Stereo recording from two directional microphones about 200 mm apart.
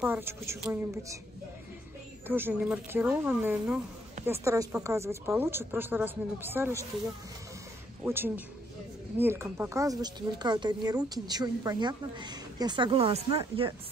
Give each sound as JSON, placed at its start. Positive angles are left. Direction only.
{"t": 0.0, "sound": "speech", "side_deg": -10}
{"t": 2.2, "sound": "speech", "side_deg": -10}
{"t": 8.0, "sound": "speech", "side_deg": -10}